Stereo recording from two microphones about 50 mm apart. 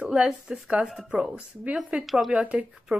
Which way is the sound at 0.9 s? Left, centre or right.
Centre.